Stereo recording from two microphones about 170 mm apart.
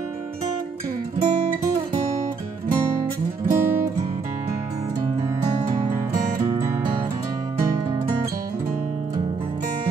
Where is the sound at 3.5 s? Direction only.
15° right (ahead or behind).